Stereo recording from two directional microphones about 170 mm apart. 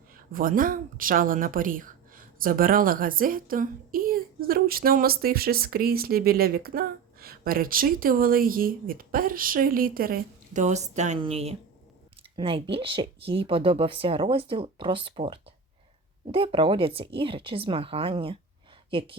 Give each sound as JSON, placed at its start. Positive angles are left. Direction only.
{"t": 0.3, "sound": "a woman's voice", "side_deg": -55}